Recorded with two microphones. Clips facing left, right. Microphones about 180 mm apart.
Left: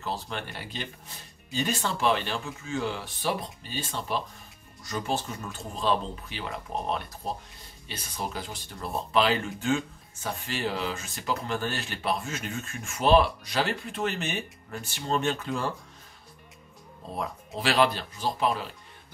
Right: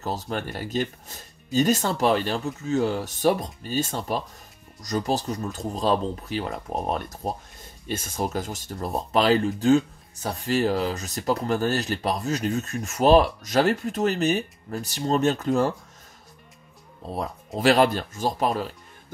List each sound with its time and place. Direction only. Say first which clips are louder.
0.0 s speech: right 5 dB; 45° right (ahead or behind)
17.1 s speech: right 4 dB; 40° right (ahead or behind)